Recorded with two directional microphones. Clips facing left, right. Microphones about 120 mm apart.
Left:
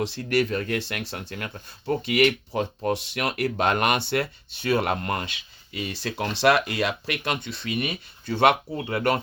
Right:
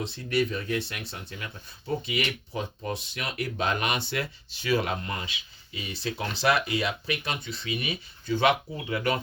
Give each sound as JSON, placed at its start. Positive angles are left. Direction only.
{"t": 0.0, "sound": "speech", "side_deg": 90}
{"t": 2.0, "sound": "speech", "side_deg": 80}